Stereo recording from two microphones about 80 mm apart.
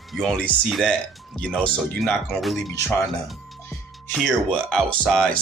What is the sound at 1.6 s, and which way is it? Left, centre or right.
Speech, centre.